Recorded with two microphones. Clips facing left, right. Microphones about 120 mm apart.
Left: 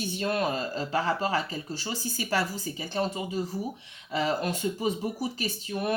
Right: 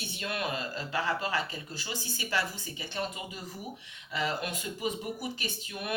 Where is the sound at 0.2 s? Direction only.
35° left (ahead or behind).